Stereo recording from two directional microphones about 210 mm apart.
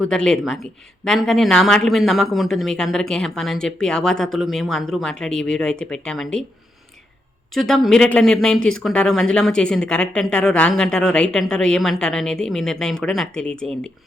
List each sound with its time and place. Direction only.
0.0 s speech: 5° left (ahead or behind)
7.5 s speech: centre (ahead or behind)